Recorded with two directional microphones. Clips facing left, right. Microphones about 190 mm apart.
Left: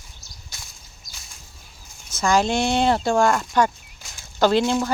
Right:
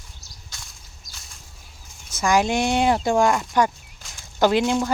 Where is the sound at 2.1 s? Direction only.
15° right (ahead or behind).